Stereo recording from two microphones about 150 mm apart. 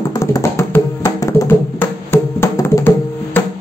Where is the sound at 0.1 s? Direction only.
20° left (ahead or behind).